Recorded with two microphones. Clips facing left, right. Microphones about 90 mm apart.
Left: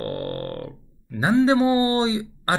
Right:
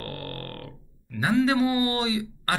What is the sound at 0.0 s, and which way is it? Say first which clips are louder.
Speech: left 8 dB; 30° left (ahead or behind).